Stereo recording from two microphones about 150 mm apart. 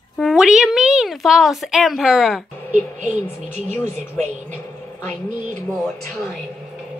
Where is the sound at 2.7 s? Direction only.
55° right (ahead or behind).